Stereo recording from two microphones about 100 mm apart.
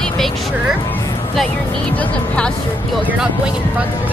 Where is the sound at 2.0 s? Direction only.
10° left (ahead or behind).